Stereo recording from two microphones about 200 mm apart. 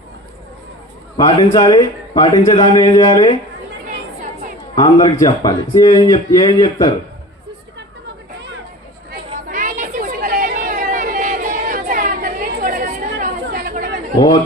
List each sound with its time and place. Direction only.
1.1 s speech: 25° left (ahead or behind)
4.7 s a man's voice: 20° left (ahead or behind)
9.5 s chatter: 40° right (ahead or behind)